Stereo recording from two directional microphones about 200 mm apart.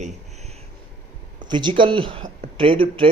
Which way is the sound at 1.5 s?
25° right (ahead or behind).